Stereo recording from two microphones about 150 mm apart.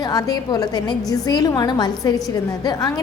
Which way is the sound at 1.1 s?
25° left (ahead or behind).